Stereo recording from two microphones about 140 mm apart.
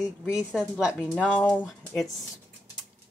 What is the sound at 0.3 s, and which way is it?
Speech, 10° right (ahead or behind).